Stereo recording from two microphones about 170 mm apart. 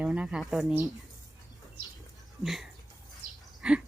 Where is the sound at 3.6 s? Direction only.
5° right (ahead or behind).